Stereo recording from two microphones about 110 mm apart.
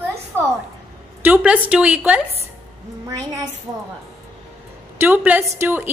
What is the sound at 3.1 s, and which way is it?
Speech, 35° right (ahead or behind).